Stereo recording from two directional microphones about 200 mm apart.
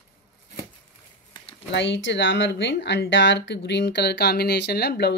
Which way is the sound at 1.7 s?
65° left (ahead or behind).